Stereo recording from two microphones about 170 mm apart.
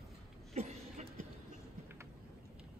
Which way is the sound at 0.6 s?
40° right (ahead or behind).